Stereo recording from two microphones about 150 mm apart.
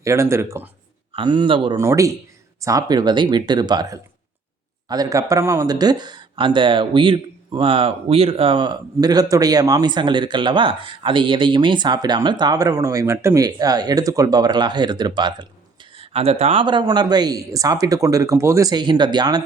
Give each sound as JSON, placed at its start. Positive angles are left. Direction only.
{"t": 0.0, "sound": "speech", "side_deg": -20}
{"t": 1.1, "sound": "speech", "side_deg": -30}
{"t": 1.7, "sound": "speech", "side_deg": -20}